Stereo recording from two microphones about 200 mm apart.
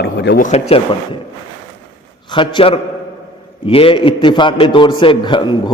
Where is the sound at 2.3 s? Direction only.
25° left (ahead or behind).